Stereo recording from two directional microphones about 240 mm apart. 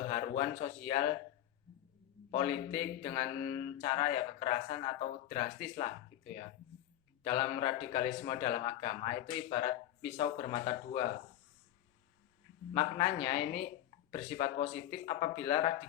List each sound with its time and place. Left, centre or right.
0.1 s a man's voice: left
2.3 s a man's voice: left
7.3 s a man's voice: left
12.7 s a man's voice: left